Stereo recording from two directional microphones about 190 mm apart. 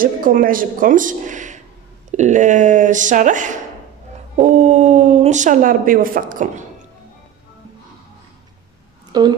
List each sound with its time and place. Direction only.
0.0 s speech: 45° right (ahead or behind)
9.1 s a woman's voice: 20° right (ahead or behind)